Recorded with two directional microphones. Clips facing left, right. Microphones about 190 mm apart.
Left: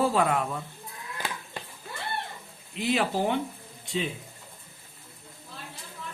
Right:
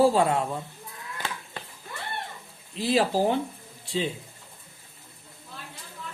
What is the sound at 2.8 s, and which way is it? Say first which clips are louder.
Speech: right 3 dB; 35° right (ahead or behind).